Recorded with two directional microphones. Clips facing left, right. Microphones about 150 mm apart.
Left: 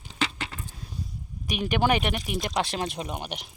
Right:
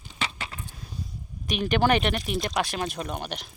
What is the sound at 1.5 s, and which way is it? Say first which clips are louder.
Speech: right 2 dB; 15° left (ahead or behind).